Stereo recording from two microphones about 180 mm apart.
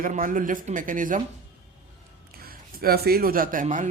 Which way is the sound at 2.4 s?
55° right (ahead or behind).